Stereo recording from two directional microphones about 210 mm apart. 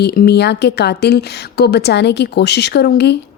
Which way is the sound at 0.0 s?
50° left (ahead or behind).